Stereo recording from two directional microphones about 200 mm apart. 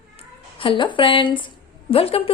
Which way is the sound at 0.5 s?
25° left (ahead or behind).